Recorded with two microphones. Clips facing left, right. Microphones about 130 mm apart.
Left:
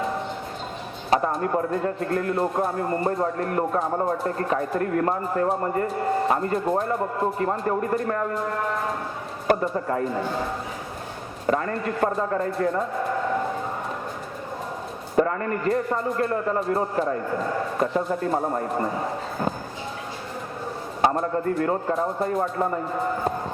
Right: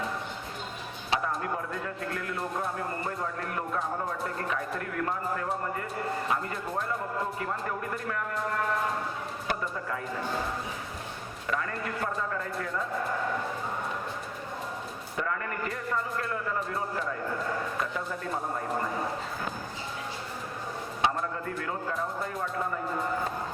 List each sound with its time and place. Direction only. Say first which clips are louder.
1.3 s speech: left 8 dB; 40° left (ahead or behind)
9.5 s speech: left 11 dB; 40° left (ahead or behind)
11.4 s speech: left 9 dB; 40° left (ahead or behind)
15.1 s speech: left 11 dB; 40° left (ahead or behind)
21.0 s speech: left 8 dB; 40° left (ahead or behind)